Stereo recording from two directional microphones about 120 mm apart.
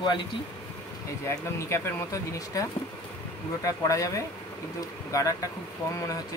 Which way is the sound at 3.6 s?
25° left (ahead or behind).